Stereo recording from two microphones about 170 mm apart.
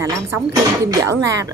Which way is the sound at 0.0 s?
20° right (ahead or behind).